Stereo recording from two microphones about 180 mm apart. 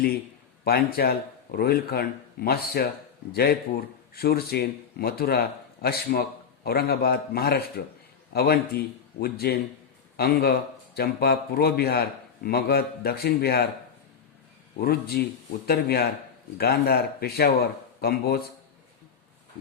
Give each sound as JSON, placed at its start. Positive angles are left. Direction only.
{"t": 0.6, "sound": "speech", "side_deg": 60}
{"t": 14.8, "sound": "speech", "side_deg": 60}